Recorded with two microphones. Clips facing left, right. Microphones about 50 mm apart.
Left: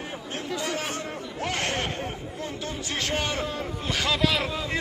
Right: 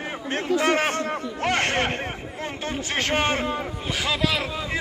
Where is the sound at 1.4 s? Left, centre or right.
Right.